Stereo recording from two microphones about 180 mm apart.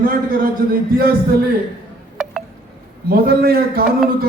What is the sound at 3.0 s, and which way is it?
Speech, 60° right (ahead or behind).